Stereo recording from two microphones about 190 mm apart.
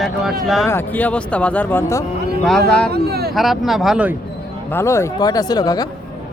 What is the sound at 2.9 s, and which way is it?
Speech, 55° right (ahead or behind).